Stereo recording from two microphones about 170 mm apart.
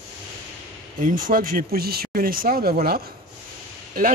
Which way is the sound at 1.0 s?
55° right (ahead or behind).